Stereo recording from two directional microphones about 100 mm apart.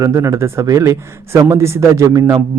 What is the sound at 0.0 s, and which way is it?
Speech, 30° right (ahead or behind).